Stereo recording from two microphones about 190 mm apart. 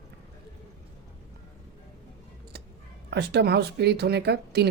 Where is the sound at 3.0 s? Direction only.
60° right (ahead or behind).